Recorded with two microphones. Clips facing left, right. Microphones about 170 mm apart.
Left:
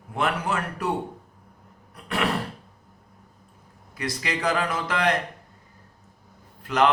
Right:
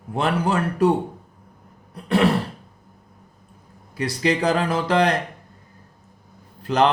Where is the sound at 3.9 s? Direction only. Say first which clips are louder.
Right 8 dB; 30° right (ahead or behind).